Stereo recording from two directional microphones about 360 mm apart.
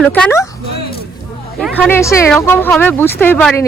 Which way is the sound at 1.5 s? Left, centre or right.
Centre.